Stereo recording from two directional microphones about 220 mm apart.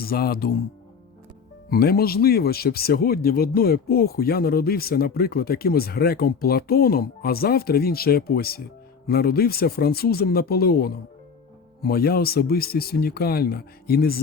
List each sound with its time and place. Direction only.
0.0 s speech: 45° left (ahead or behind)
1.7 s speech: 45° left (ahead or behind)